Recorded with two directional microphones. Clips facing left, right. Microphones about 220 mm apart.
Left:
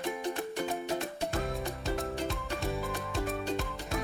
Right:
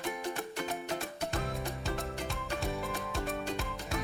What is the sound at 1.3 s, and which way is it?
Music, centre (ahead or behind).